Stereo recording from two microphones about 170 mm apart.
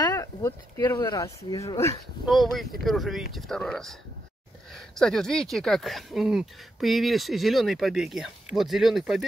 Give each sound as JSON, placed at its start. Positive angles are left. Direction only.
{"t": 0.0, "sound": "speech", "side_deg": 20}
{"t": 2.2, "sound": "speech", "side_deg": 0}